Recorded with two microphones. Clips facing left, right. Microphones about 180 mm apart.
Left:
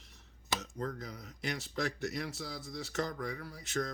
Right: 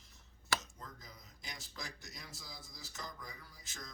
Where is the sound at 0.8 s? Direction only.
70° left (ahead or behind).